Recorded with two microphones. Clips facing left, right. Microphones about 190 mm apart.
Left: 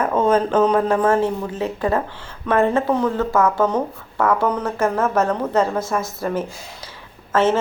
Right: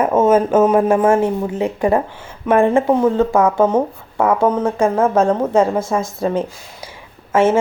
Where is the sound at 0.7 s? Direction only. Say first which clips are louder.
Right 4 dB; 20° right (ahead or behind).